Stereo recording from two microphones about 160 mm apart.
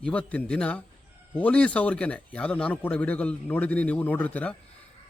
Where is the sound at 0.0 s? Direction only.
10° left (ahead or behind).